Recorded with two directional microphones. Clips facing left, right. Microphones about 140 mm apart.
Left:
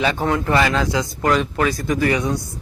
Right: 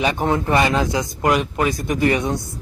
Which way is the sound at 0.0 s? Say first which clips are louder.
Even; 15° right (ahead or behind).